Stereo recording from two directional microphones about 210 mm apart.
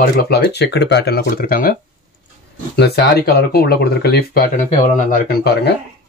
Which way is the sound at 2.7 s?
50° left (ahead or behind).